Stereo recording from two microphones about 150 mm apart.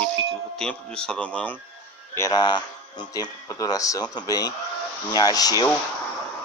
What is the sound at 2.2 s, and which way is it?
Speech, 25° left (ahead or behind).